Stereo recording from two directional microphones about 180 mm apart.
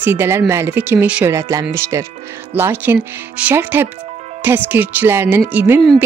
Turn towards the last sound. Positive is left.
turn(degrees=-10)  # may be behind; listen again after turning